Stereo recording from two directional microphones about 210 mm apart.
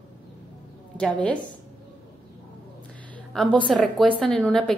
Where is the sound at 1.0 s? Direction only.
5° left (ahead or behind).